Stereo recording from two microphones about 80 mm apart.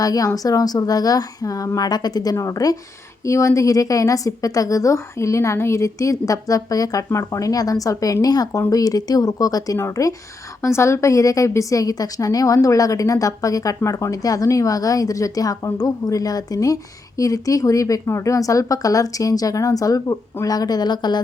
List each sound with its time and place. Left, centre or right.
0.0 s a woman's voice: left
2.3 s a woman's voice: left